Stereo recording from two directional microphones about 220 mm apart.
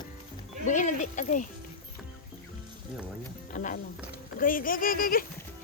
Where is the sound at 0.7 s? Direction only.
35° left (ahead or behind).